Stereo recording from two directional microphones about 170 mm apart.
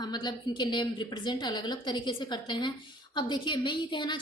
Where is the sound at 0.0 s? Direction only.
25° left (ahead or behind).